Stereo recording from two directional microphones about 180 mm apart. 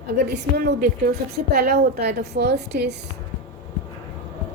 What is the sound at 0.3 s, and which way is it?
A woman's voice, 65° right (ahead or behind).